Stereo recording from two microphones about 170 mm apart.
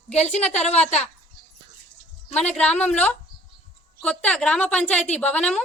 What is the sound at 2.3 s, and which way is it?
Speech, 40° left (ahead or behind).